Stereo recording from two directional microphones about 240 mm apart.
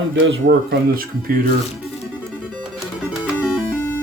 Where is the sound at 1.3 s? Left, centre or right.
Right.